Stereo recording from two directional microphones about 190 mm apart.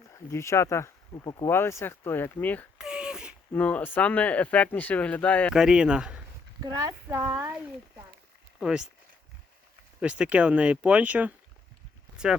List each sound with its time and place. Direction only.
0.1 s speech: 15° left (ahead or behind)
2.7 s a sound: 5° right (ahead or behind)
3.5 s speech: 10° left (ahead or behind)
5.5 s speech: 5° right (ahead or behind)
6.6 s speech: 20° right (ahead or behind)
8.5 s speech: 5° right (ahead or behind)
10.0 s speech: 5° right (ahead or behind)